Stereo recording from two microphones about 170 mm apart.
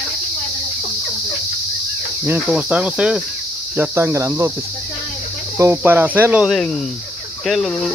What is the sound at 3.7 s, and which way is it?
Cricket, 15° right (ahead or behind).